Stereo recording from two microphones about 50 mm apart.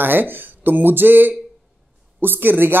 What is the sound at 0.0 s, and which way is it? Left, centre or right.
Speech, right.